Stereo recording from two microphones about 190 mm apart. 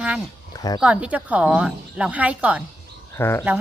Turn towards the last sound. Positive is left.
turn(degrees=15)  # may be behind; listen again after turning